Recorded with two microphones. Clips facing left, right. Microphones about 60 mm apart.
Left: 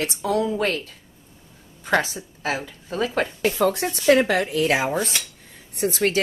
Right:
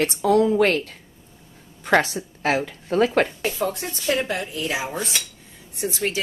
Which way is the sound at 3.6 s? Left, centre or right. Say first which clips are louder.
Left 7 dB; left.